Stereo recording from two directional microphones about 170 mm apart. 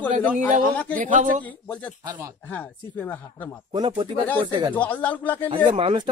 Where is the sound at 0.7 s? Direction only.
10° left (ahead or behind).